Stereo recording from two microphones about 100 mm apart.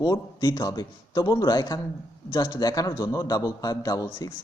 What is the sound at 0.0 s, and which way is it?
A man's voice, 40° left (ahead or behind).